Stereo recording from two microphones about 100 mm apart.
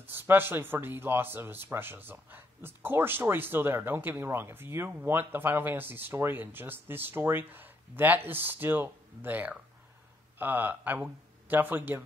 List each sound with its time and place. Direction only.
0.0 s speech: 20° right (ahead or behind)